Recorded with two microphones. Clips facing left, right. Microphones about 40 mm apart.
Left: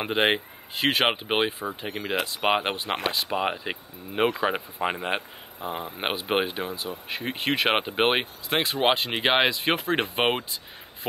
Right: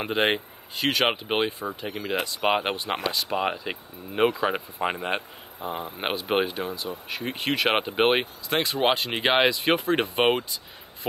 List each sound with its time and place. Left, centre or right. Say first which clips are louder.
0.0 s speech: left 1 dB; centre
0.7 s speech: left 1 dB; centre
1.7 s speech: even; left
2.5 s speech: even; centre